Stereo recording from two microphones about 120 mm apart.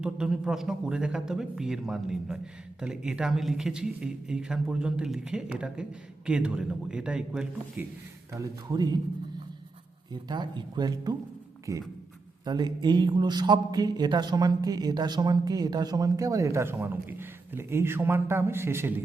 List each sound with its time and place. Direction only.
0.0 s a man's voice: 5° right (ahead or behind)
8.4 s speech: 35° right (ahead or behind)
10.1 s speech: 40° right (ahead or behind); by 19.0 s 20° right (ahead or behind)